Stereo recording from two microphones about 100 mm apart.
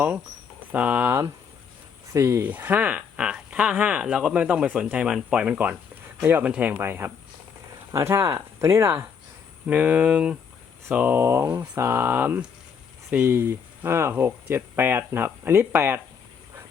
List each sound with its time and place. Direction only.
0.7 s speech: 15° right (ahead or behind)
2.4 s speech: 15° right (ahead or behind)
9.6 s speech: 15° right (ahead or behind)
11.4 s speech: 15° right (ahead or behind)
11.7 s speech: 25° right (ahead or behind)